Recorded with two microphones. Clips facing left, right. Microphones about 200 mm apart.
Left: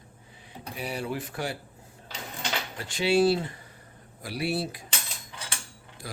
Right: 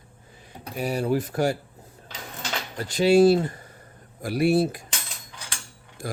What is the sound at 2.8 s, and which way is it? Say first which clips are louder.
Speech: right 6 dB; 40° right (ahead or behind).